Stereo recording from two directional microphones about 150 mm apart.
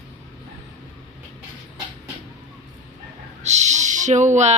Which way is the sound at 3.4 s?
50° right (ahead or behind).